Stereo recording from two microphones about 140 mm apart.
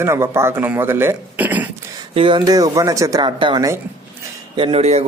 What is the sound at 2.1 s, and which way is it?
Speech, 40° right (ahead or behind).